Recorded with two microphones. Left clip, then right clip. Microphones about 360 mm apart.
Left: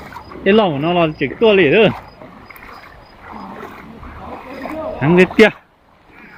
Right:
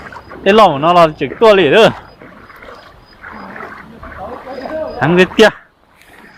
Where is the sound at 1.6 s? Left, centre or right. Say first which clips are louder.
Right 4 dB; centre.